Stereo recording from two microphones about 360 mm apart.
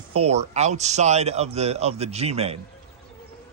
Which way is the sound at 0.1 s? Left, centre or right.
Centre.